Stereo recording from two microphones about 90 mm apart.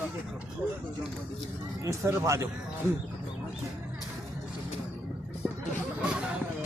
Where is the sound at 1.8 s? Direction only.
35° right (ahead or behind).